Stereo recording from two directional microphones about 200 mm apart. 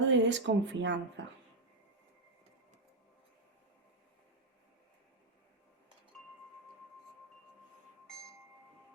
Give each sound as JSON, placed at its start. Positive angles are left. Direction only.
{"t": 0.0, "sound": "speech", "side_deg": -65}
{"t": 8.0, "sound": "chime", "side_deg": 5}